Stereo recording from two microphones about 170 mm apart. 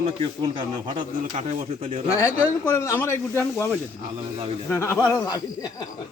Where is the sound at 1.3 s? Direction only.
45° right (ahead or behind).